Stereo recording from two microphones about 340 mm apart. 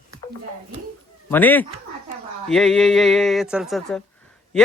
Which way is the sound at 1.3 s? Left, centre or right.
Centre.